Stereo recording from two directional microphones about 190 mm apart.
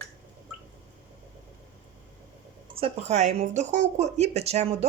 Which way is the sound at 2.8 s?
35° right (ahead or behind).